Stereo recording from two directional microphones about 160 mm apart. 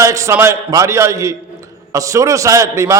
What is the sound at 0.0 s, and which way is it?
A man's voice, 20° right (ahead or behind).